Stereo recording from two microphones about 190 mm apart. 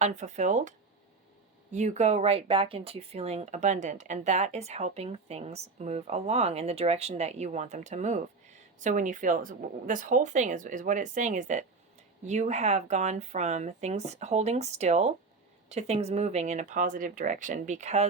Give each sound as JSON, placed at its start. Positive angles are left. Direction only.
{"t": 0.0, "sound": "speech", "side_deg": -35}
{"t": 1.7, "sound": "speech", "side_deg": -40}